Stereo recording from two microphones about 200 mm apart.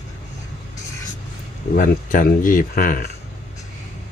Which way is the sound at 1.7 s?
45° left (ahead or behind).